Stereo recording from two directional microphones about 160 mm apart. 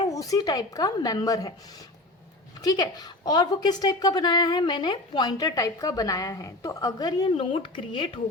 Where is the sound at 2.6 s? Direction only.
25° left (ahead or behind).